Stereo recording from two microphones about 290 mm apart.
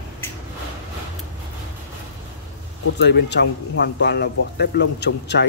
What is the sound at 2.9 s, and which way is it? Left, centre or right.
A man's voice, left.